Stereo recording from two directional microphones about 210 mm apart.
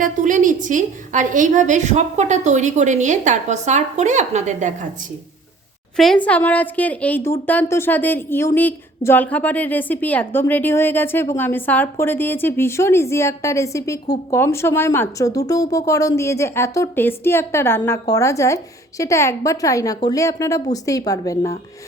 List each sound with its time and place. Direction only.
0.0 s a woman's voice: 35° right (ahead or behind)
6.0 s a woman's voice: 5° left (ahead or behind)